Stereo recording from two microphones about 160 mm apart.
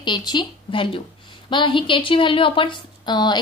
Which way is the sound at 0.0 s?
30° left (ahead or behind).